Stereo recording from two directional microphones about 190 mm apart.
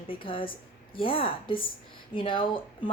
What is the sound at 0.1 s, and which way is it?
Speech, 25° left (ahead or behind).